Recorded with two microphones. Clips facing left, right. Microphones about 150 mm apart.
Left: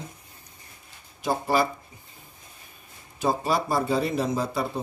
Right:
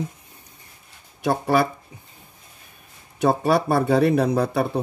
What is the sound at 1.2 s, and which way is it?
Speech, 60° right (ahead or behind).